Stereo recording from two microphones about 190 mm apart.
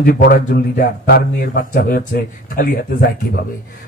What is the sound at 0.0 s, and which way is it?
A man's voice, 50° left (ahead or behind).